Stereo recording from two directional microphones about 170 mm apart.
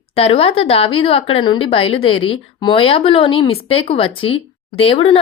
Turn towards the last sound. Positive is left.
turn(degrees=35)  # may be behind; listen again after turning